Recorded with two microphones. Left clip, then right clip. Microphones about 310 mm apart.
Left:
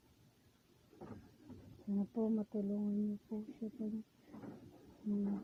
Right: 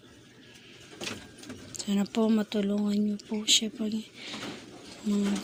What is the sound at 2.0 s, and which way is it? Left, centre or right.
Speech, left.